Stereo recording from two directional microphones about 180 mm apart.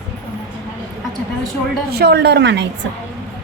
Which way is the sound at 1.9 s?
65° right (ahead or behind).